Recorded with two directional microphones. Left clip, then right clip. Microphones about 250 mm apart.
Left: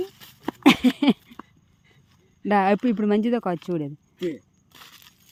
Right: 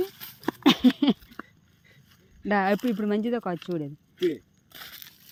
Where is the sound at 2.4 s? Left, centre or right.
Centre.